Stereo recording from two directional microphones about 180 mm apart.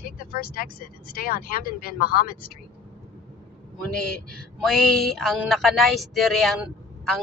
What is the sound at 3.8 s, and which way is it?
Speech, 5° left (ahead or behind).